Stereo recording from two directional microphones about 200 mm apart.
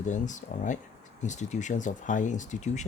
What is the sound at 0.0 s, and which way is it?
Speech, 40° left (ahead or behind).